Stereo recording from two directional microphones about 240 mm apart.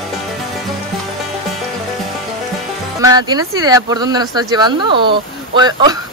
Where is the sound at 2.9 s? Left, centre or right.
Centre.